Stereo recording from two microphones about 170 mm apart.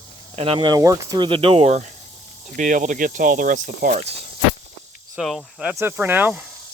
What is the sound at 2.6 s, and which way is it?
Speech, 50° right (ahead or behind).